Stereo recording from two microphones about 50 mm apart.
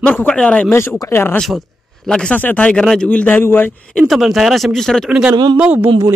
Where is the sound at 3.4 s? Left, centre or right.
Left.